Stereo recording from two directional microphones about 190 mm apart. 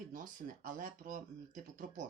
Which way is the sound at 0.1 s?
45° right (ahead or behind).